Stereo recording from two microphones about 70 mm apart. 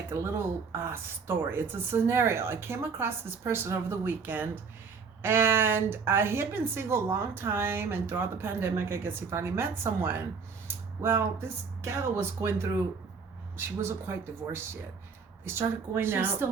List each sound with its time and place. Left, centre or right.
0.1 s speech: right
15.4 s speech: right